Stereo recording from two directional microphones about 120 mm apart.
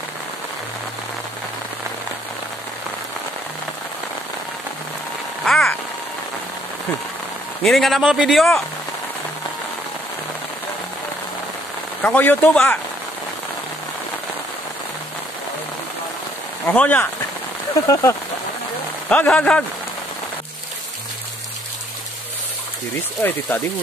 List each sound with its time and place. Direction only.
5.4 s a sound: 5° left (ahead or behind)
7.6 s a man's voice: centre (ahead or behind)
12.0 s speech: 10° left (ahead or behind)
16.6 s speech: 15° left (ahead or behind)
17.8 s speech: 25° left (ahead or behind)
19.0 s speech: 10° left (ahead or behind)
23.5 s speech: 15° left (ahead or behind)